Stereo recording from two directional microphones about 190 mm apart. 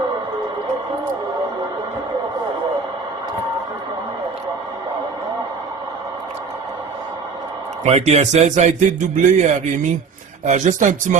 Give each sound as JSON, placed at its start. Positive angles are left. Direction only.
{"t": 7.9, "sound": "a man's voice", "side_deg": -35}